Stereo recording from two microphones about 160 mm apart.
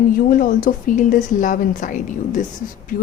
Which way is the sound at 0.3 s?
60° left (ahead or behind).